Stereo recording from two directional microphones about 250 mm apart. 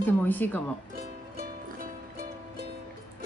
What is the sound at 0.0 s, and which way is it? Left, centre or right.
Speech, centre.